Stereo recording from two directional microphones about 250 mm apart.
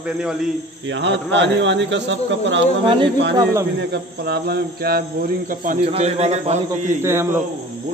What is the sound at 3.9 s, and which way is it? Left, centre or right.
Speech, right.